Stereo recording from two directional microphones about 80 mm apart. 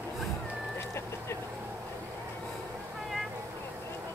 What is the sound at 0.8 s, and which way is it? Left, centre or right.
Vehicle, left.